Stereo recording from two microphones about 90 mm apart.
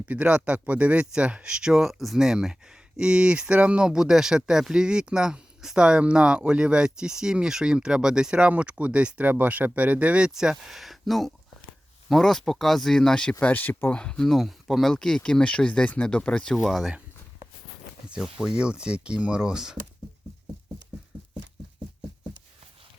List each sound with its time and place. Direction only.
0.0 s speech: 15° right (ahead or behind); by 13.3 s 10° left (ahead or behind)
13.4 s speech: 20° left (ahead or behind)
14.0 s speech: 10° left (ahead or behind)
16.6 s speech: centre (ahead or behind)
18.1 s speech: 5° right (ahead or behind)